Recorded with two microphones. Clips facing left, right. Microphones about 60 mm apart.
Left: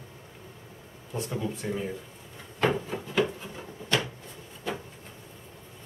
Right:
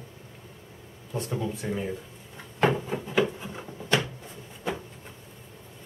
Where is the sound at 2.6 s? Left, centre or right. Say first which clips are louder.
Right 2 dB; centre.